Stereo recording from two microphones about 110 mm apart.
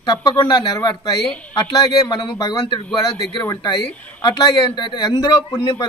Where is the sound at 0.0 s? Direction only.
40° left (ahead or behind).